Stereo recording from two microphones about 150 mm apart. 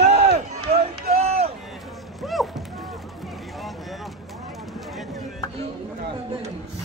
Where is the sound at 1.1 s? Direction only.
45° right (ahead or behind).